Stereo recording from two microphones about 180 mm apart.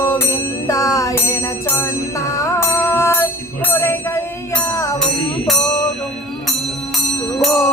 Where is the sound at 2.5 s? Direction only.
15° left (ahead or behind).